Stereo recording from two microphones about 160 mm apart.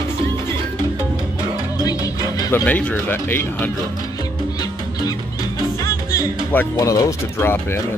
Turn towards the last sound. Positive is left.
turn(degrees=15)  # may be behind; listen again after turning